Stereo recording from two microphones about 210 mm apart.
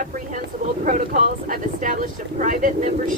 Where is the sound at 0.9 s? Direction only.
40° right (ahead or behind).